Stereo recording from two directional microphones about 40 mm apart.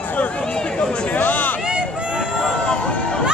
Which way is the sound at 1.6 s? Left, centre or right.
Centre.